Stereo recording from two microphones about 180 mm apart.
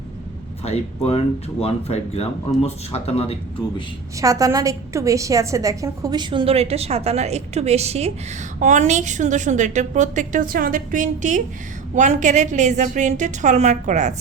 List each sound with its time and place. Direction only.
0.6 s speech: 35° left (ahead or behind)
4.2 s a woman's voice: 20° right (ahead or behind); by 14.1 s 40° right (ahead or behind)